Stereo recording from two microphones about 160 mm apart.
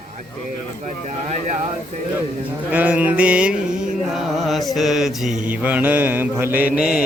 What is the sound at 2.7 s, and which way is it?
Music, 10° right (ahead or behind).